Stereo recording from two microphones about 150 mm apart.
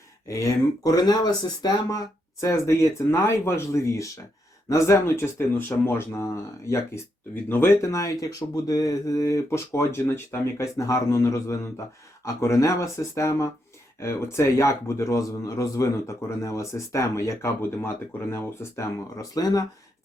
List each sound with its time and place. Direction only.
0.3 s speech: 20° left (ahead or behind)